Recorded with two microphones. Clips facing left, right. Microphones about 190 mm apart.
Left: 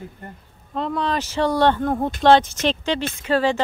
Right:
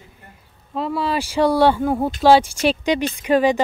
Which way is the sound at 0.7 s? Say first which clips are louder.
Right 1 dB; 5° right (ahead or behind).